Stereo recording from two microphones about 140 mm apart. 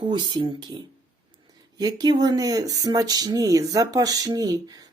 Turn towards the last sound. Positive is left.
turn(degrees=-25)  # may be behind; listen again after turning